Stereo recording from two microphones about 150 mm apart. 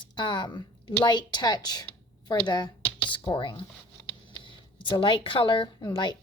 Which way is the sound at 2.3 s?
30° left (ahead or behind).